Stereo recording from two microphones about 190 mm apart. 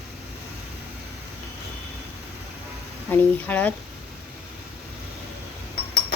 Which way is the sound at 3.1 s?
10° left (ahead or behind).